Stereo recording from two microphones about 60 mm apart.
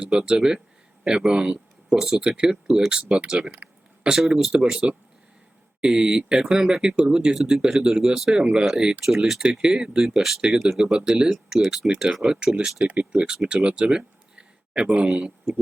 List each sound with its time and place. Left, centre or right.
0.1 s speech: centre
12.8 s speech: right
13.1 s speech: centre